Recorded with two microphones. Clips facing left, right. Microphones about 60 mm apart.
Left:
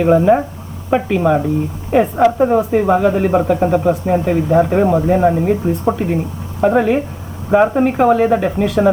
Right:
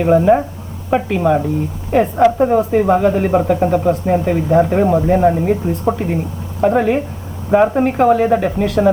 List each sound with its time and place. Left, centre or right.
0.0 s speech: centre